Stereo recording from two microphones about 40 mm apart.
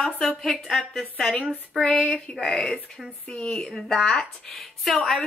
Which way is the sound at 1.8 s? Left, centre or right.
Left.